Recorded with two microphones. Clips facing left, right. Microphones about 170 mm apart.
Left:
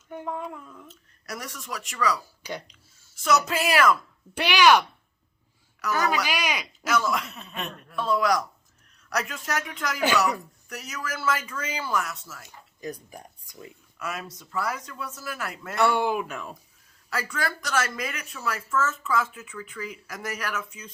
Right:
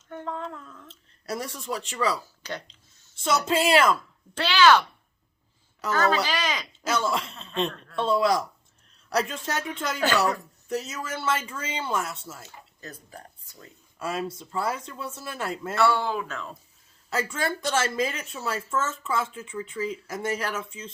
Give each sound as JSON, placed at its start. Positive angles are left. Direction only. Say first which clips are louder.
{"t": 0.1, "sound": "a sound", "louder": "left 1 dB", "side_deg": 10}
{"t": 0.9, "sound": "speech", "louder": "right 8 dB", "side_deg": -30}
{"t": 2.4, "sound": "speech", "louder": "even", "side_deg": 10}
{"t": 3.2, "sound": "speech", "louder": "even", "side_deg": -30}
{"t": 4.4, "sound": "speech", "louder": "even", "side_deg": 15}
{"t": 5.9, "sound": "speech", "louder": "right 2 dB", "side_deg": 10}
{"t": 6.8, "sound": "speech", "louder": "left 1 dB", "side_deg": -30}
{"t": 7.7, "sound": "speech", "louder": "right 1 dB", "side_deg": 10}
{"t": 7.9, "sound": "speech", "louder": "right 1 dB", "side_deg": -25}
{"t": 12.8, "sound": "speech", "louder": "left 7 dB", "side_deg": 15}
{"t": 14.0, "sound": "speech", "louder": "right 5 dB", "side_deg": -30}
{"t": 15.7, "sound": "speech", "louder": "left 1 dB", "side_deg": 15}
{"t": 17.1, "sound": "speech", "louder": "right 2 dB", "side_deg": -25}